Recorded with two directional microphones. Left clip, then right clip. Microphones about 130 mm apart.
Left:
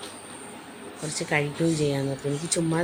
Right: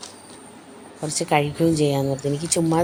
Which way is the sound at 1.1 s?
25° right (ahead or behind).